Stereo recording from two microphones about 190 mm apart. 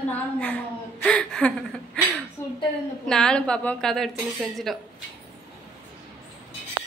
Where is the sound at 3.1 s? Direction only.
5° left (ahead or behind).